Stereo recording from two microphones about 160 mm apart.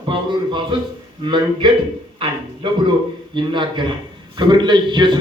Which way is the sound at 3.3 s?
30° right (ahead or behind).